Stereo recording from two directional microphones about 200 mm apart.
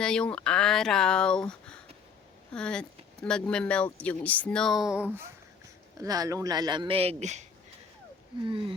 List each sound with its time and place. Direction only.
0.0 s speech: 5° left (ahead or behind)
6.0 s speech: 15° right (ahead or behind); by 7.4 s 35° right (ahead or behind)